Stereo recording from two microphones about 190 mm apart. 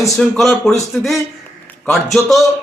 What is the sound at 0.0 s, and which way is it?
A man's voice, centre (ahead or behind).